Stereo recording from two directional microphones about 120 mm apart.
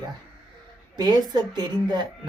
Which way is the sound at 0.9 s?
35° right (ahead or behind).